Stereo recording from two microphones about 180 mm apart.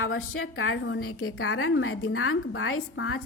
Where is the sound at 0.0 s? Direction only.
90° left.